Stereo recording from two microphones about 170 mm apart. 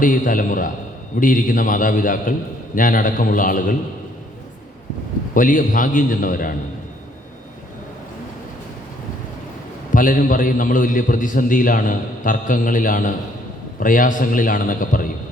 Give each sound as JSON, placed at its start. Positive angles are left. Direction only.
{"t": 0.0, "sound": "a man's voice", "side_deg": 50}
{"t": 5.3, "sound": "a man's voice", "side_deg": 50}
{"t": 9.9, "sound": "a man's voice", "side_deg": 50}